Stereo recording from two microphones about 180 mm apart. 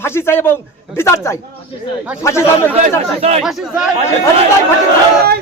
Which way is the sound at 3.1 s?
35° right (ahead or behind).